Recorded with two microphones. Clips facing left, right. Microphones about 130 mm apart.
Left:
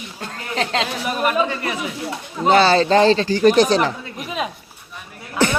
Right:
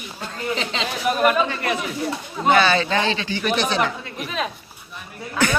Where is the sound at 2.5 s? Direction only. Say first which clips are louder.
Left 4 dB; 35° left (ahead or behind).